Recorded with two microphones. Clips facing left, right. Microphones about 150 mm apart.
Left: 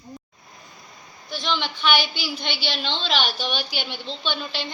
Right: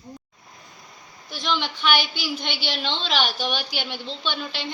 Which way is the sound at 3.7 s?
45° right (ahead or behind).